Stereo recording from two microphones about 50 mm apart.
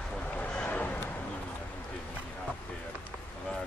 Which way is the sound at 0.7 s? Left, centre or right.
Left.